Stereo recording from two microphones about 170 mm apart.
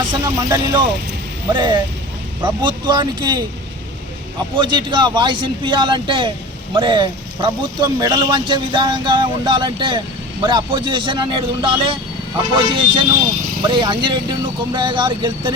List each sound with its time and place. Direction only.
0.0 s speech: 25° right (ahead or behind)
4.5 s speech: 30° right (ahead or behind)